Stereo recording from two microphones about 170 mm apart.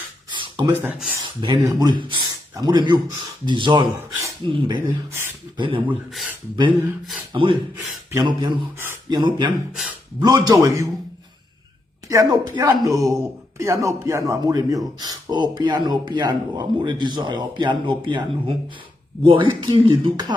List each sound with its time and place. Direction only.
0.3 s a sound: 30° right (ahead or behind)
0.8 s speech: 10° right (ahead or behind)
1.4 s speech: 25° right (ahead or behind)
6.1 s speech: centre (ahead or behind)
7.3 s speech: 25° right (ahead or behind)
12.0 s speech: 20° right (ahead or behind)